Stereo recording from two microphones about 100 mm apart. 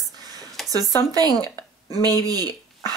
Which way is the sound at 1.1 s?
40° right (ahead or behind).